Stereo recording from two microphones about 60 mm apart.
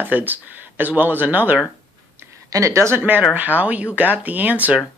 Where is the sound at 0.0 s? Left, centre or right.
Right.